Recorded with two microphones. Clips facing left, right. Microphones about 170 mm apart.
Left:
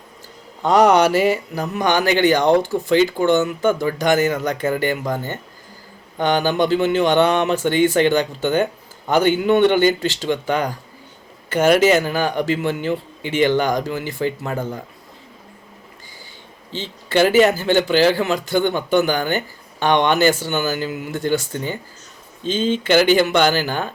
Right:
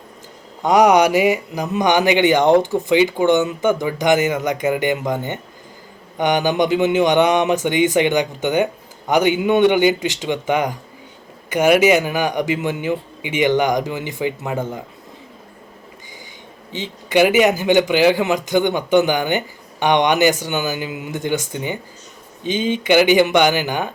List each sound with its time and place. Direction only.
0.6 s speech: 15° right (ahead or behind)
16.7 s speech: 15° right (ahead or behind)